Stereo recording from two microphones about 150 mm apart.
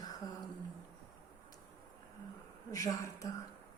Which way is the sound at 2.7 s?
20° left (ahead or behind).